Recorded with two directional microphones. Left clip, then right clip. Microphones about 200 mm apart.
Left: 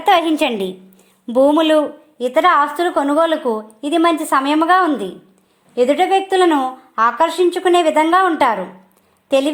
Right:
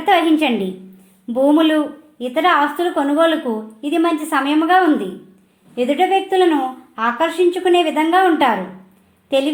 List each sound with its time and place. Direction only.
0.0 s a woman's voice: 45° left (ahead or behind)